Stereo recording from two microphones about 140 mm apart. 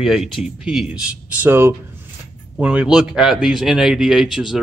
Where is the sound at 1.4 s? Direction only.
15° right (ahead or behind).